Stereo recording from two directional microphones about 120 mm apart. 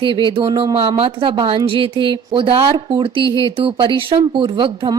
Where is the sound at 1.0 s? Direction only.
50° right (ahead or behind).